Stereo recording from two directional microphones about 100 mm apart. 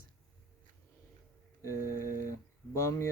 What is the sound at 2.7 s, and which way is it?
Speech, 30° left (ahead or behind).